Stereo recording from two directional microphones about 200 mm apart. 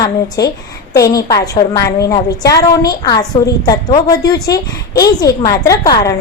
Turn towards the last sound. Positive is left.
turn(degrees=20)  # may be behind; listen again after turning